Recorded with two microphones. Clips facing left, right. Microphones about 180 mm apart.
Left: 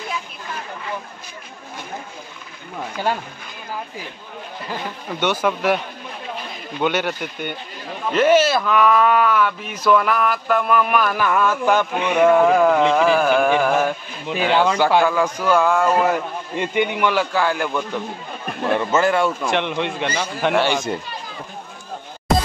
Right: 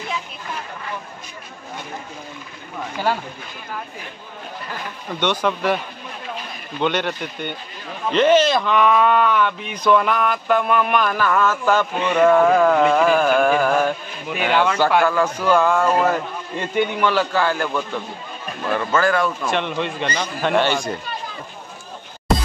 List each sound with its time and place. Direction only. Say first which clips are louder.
5.2 s a man's voice: left 1 dB; 5° left (ahead or behind)
6.8 s a man's voice: even; 5° left (ahead or behind)
18.7 s speech: left 1 dB; 25° left (ahead or behind)
19.4 s a man's voice: left 1 dB; 15° left (ahead or behind)